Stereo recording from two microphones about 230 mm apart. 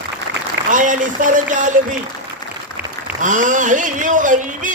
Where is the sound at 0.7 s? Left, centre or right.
Right.